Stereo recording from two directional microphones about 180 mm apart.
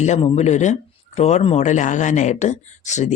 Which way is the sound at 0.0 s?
35° left (ahead or behind).